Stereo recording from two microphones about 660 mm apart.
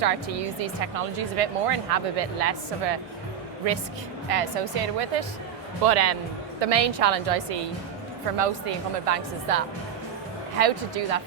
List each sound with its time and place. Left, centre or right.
0.0 s speech: right
4.3 s a woman's voice: right
5.8 s a woman's voice: right